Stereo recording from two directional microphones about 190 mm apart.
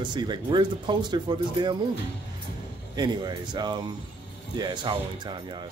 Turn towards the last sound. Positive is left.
turn(degrees=-25)  # may be behind; listen again after turning